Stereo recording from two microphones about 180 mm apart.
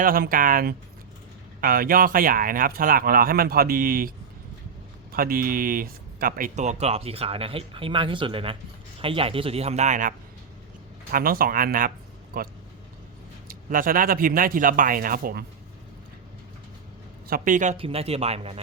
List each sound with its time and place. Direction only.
0.0 s speech: 50° right (ahead or behind)
5.1 s speech: 55° right (ahead or behind)
13.5 s speech: 50° right (ahead or behind)
17.2 s speech: 50° right (ahead or behind); by 18.6 s 35° right (ahead or behind)